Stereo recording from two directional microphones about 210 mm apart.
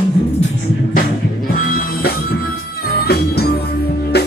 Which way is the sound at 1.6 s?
45° left (ahead or behind).